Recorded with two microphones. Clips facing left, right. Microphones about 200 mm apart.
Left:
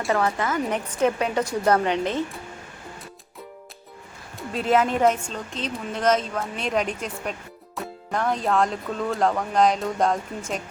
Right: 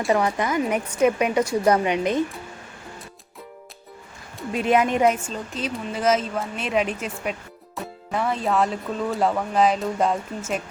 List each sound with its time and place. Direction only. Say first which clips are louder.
0.1 s a woman's voice: right 2 dB; 15° right (ahead or behind)
4.5 s a woman's voice: right 1 dB; 10° right (ahead or behind)